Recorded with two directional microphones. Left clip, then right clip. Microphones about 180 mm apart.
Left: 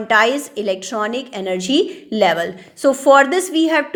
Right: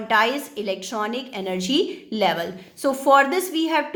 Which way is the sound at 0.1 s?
30° left (ahead or behind).